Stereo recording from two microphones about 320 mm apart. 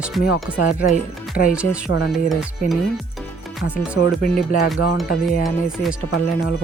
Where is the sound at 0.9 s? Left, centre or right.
Left.